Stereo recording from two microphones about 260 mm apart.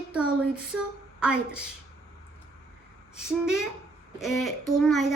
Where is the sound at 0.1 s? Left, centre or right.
Centre.